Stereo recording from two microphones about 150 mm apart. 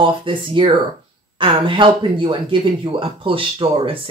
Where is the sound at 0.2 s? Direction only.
35° right (ahead or behind).